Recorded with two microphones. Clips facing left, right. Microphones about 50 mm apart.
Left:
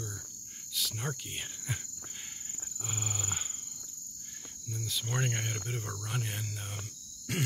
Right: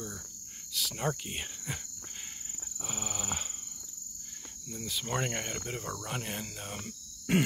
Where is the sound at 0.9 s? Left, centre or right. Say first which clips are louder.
Right 5 dB; centre.